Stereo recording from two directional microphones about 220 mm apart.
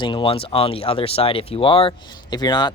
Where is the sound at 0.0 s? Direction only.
20° left (ahead or behind).